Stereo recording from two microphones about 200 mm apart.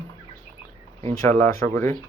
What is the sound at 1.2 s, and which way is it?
Speech, 10° left (ahead or behind).